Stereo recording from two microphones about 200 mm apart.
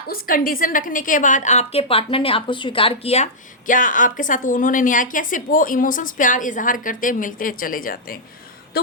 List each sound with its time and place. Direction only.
0.1 s a woman's voice: 45° left (ahead or behind); by 3.2 s 30° left (ahead or behind)
3.7 s a woman's voice: 40° left (ahead or behind)
8.7 s a sound: 50° left (ahead or behind)